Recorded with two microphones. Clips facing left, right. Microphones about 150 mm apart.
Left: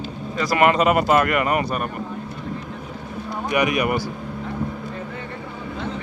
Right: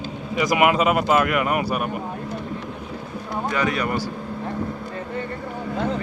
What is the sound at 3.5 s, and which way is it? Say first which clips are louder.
Speech: left 4 dB; 15° left (ahead or behind).